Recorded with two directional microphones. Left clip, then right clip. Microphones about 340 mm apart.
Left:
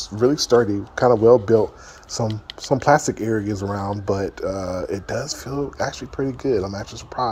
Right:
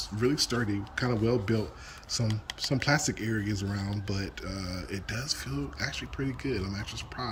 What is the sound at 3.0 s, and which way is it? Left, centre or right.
Speech, centre.